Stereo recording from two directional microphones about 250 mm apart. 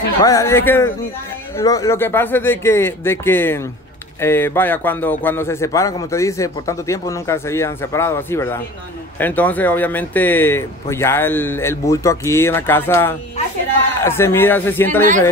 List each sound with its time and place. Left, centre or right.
0.2 s a man's voice: centre